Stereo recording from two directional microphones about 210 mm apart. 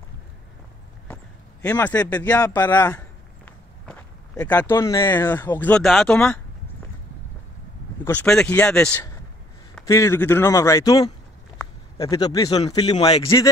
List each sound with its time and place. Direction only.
1.0 s a sound: 5° left (ahead or behind)
2.2 s speech: 10° left (ahead or behind)
8.0 s speech: 10° left (ahead or behind)
12.9 s speech: 30° left (ahead or behind)
13.2 s speech: 15° left (ahead or behind)